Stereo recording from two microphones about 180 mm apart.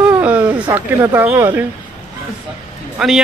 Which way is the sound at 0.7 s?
10° right (ahead or behind).